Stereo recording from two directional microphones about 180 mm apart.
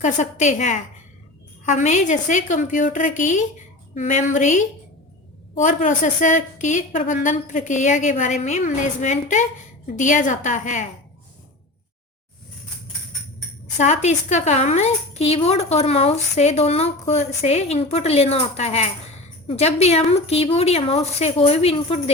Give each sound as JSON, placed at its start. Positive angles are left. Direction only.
{"t": 0.0, "sound": "a woman's voice", "side_deg": 40}
{"t": 13.7, "sound": "a woman's voice", "side_deg": 40}